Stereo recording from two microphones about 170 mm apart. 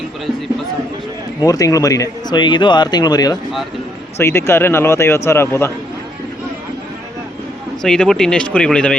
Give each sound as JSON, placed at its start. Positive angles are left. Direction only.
{"t": 1.4, "sound": "a man's voice", "side_deg": 20}
{"t": 7.8, "sound": "speech", "side_deg": 5}